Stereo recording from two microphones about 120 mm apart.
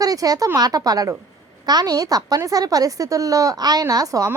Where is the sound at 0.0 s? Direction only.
30° right (ahead or behind).